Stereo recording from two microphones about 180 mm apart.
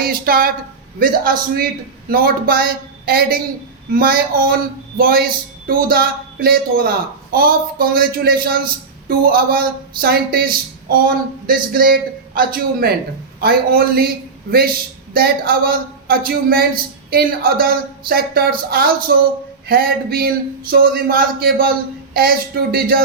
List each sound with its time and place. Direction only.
0.0 s a man's voice: 55° right (ahead or behind)